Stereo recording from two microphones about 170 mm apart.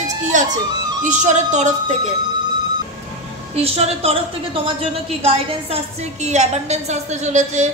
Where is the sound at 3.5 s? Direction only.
35° right (ahead or behind).